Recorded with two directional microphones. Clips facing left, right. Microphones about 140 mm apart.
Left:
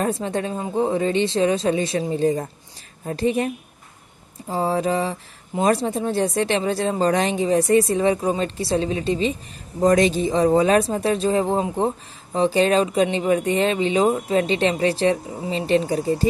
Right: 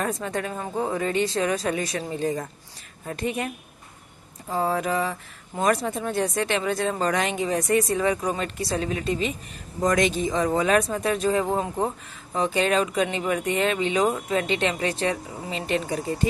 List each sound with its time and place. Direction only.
0.0 s speech: 30° left (ahead or behind)